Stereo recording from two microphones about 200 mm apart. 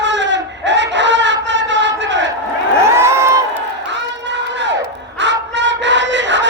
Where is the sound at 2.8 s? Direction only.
15° right (ahead or behind).